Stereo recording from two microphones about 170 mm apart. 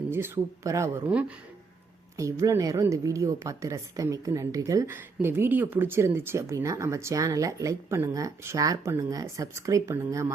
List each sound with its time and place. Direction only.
0.1 s a woman's voice: 15° right (ahead or behind)